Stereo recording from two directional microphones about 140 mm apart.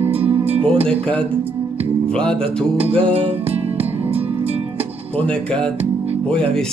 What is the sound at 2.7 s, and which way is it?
Music, 45° right (ahead or behind).